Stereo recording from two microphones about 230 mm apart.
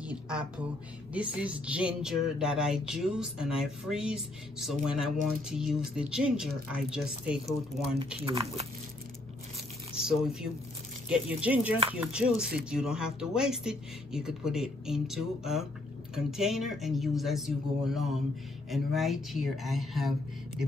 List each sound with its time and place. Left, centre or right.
0.0 s a woman's voice: centre
1.1 s music: centre
8.2 s speech: right
10.0 s music: centre
11.1 s speech: centre
12.0 s music: centre